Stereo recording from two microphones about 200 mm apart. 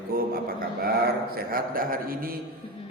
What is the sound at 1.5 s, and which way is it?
Speech, 45° right (ahead or behind).